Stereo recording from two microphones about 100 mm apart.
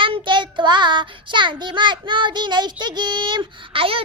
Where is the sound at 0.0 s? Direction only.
55° right (ahead or behind).